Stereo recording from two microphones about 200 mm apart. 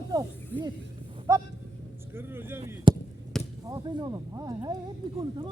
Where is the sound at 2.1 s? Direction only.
10° right (ahead or behind).